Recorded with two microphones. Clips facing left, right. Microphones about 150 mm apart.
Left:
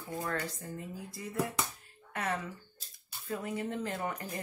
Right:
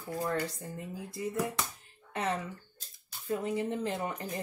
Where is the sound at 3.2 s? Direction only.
20° right (ahead or behind).